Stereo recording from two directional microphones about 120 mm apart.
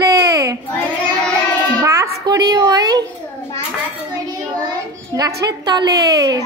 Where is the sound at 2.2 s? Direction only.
35° right (ahead or behind).